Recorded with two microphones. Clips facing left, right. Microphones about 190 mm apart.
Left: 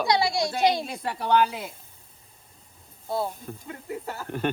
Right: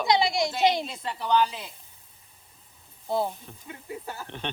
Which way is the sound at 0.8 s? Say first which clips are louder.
Left 3 dB; 55° left (ahead or behind).